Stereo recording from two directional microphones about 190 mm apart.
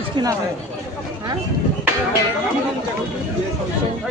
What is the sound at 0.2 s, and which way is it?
Speech, 25° right (ahead or behind).